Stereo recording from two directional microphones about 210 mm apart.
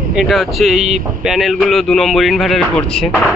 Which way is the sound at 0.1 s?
Centre (ahead or behind).